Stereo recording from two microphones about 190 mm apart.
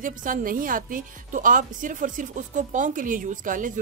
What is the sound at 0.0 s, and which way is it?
A woman's voice, 45° right (ahead or behind).